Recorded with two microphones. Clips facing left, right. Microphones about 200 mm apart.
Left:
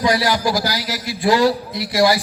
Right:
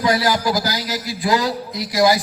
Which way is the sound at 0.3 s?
20° right (ahead or behind).